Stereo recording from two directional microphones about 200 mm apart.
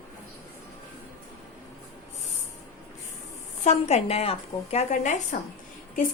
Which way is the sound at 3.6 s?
35° left (ahead or behind).